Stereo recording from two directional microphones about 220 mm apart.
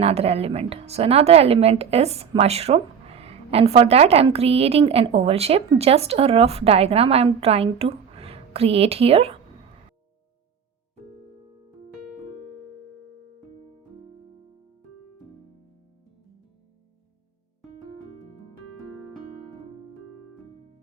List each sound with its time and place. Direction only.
0.0 s speech: 30° right (ahead or behind)